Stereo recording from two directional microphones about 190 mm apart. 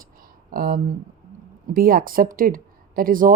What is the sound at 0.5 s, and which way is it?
Speech, 50° right (ahead or behind).